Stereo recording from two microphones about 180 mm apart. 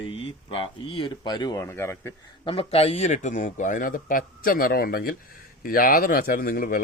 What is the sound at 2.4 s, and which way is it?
A man's voice, 30° left (ahead or behind).